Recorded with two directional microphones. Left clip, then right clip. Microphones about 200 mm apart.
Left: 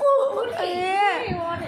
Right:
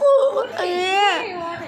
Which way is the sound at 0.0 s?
15° right (ahead or behind).